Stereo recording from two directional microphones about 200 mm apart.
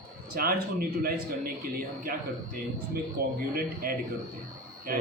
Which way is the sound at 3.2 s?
50° right (ahead or behind).